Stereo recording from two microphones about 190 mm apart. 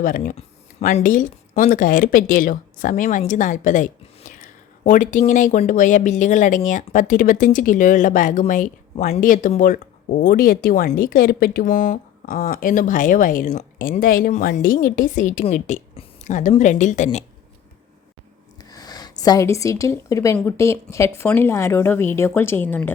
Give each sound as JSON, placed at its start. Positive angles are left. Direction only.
{"t": 0.0, "sound": "speech", "side_deg": 45}
{"t": 18.7, "sound": "speech", "side_deg": 20}